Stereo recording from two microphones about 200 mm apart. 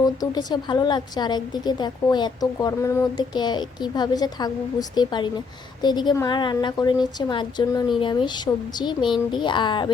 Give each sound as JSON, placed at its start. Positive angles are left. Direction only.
{"t": 0.0, "sound": "a woman's voice", "side_deg": 20}